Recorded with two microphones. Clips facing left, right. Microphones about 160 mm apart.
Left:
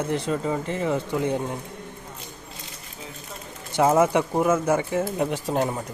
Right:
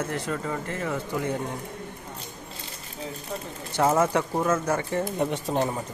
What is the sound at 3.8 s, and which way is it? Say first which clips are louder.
Speech: left 3 dB; 10° left (ahead or behind).